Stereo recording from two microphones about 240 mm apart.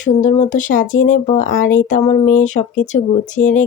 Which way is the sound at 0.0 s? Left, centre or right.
Left.